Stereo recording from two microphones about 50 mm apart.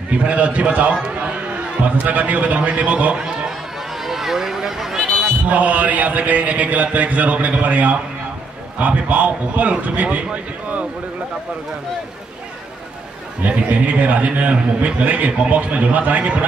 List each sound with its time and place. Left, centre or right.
0.1 s a man's voice: right
1.0 s a sound: right
2.0 s a man's voice: right
3.2 s a sound: centre
5.2 s a man's voice: right
13.4 s a man's voice: right